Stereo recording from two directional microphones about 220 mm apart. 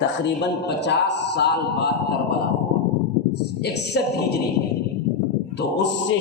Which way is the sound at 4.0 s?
50° left (ahead or behind).